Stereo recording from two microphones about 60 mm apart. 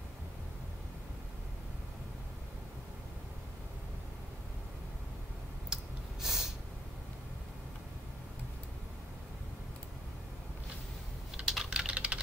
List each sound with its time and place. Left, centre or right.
6.2 s snort: centre
11.4 s typing: centre
11.8 s typing: centre